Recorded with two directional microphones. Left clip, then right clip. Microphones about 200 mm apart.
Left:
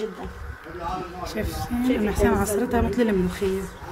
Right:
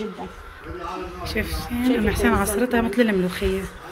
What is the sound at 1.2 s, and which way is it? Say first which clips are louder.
Speech: right 2 dB; centre (ahead or behind).